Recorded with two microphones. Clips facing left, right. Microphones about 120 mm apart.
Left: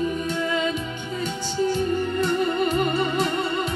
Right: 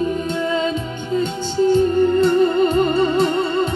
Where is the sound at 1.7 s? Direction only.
30° right (ahead or behind).